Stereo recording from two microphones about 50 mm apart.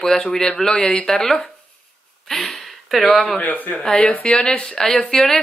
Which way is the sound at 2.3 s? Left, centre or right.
Centre.